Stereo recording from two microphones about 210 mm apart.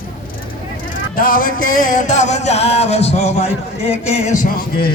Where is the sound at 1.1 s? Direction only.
45° left (ahead or behind).